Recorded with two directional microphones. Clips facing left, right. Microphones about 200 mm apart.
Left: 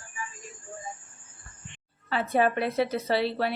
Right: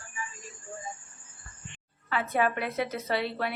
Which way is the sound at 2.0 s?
30° left (ahead or behind).